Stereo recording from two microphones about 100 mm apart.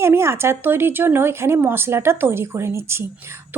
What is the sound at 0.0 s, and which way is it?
Speech, 25° right (ahead or behind).